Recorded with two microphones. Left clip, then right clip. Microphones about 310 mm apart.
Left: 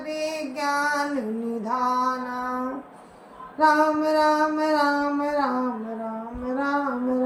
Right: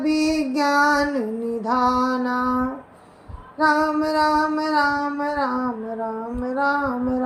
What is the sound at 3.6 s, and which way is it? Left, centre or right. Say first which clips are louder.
Mantra: even; right.